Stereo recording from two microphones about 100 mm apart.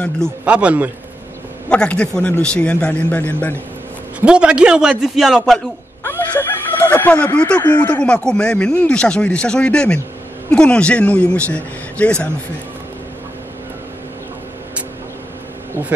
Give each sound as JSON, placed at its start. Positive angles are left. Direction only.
{"t": 0.5, "sound": "a man's voice", "side_deg": -15}
{"t": 1.7, "sound": "speech", "side_deg": 10}
{"t": 4.2, "sound": "a man's voice", "side_deg": -10}
{"t": 6.0, "sound": "a sound", "side_deg": 20}
{"t": 7.7, "sound": "speech", "side_deg": 15}